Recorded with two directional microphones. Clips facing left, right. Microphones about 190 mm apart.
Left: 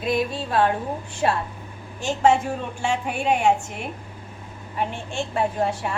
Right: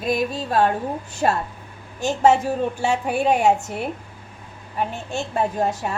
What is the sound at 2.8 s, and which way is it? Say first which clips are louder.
Speech: right 2 dB; 40° right (ahead or behind).